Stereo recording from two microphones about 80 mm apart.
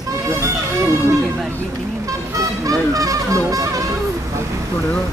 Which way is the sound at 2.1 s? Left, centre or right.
Right.